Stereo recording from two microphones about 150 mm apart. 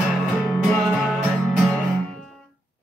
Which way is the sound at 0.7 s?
Centre (ahead or behind).